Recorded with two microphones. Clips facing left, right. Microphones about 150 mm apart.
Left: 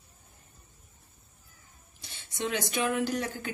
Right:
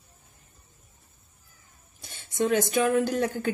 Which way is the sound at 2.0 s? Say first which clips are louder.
Right 9 dB; 45° right (ahead or behind).